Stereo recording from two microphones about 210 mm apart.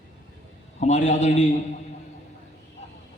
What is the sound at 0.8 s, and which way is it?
Speech, 35° left (ahead or behind).